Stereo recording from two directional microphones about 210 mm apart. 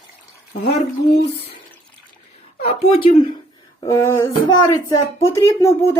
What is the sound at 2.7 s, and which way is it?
Speech, 30° left (ahead or behind).